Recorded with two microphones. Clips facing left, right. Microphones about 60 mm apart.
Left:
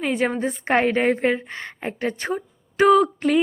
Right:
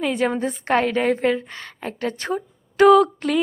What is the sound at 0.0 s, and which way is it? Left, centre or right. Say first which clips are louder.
A woman's voice: right 1 dB; centre.